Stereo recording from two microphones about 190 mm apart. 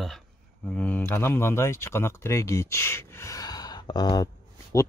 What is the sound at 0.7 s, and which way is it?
Speech, 5° left (ahead or behind).